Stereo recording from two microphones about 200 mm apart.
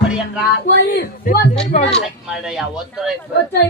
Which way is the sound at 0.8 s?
45° left (ahead or behind).